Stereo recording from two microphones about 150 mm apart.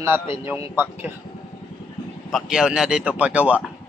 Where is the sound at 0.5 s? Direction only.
15° right (ahead or behind).